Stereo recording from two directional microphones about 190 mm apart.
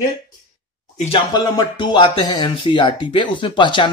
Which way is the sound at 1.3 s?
20° left (ahead or behind).